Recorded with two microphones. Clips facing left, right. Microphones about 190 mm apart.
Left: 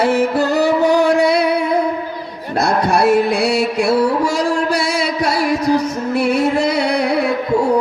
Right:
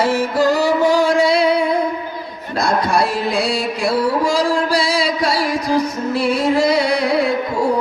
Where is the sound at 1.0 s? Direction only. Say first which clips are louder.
Left 1 dB; 65° left (ahead or behind).